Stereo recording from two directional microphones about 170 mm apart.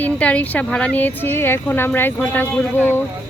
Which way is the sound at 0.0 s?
10° left (ahead or behind).